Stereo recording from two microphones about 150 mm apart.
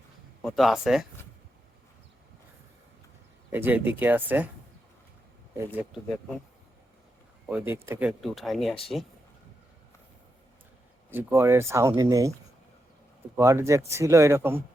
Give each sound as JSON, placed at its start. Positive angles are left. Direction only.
{"t": 0.4, "sound": "speech", "side_deg": 0}
{"t": 3.5, "sound": "speech", "side_deg": -10}
{"t": 7.4, "sound": "speech", "side_deg": -10}
{"t": 8.2, "sound": "speech", "side_deg": 0}
{"t": 11.1, "sound": "speech", "side_deg": -15}
{"t": 13.3, "sound": "speech", "side_deg": -20}